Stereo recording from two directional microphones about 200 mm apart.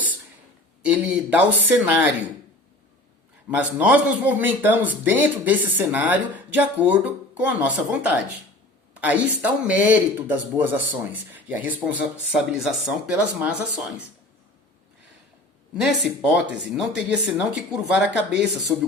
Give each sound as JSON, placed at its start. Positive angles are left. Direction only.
{"t": 0.8, "sound": "speech", "side_deg": -5}
{"t": 3.5, "sound": "speech", "side_deg": -5}
{"t": 15.7, "sound": "speech", "side_deg": -5}